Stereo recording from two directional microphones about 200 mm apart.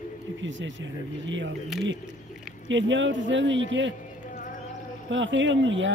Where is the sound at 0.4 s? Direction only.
70° right (ahead or behind).